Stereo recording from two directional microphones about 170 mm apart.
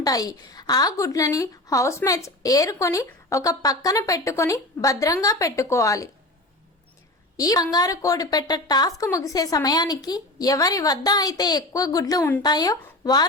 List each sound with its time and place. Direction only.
0.0 s a woman's voice: 20° left (ahead or behind)
7.3 s a woman's voice: 20° left (ahead or behind)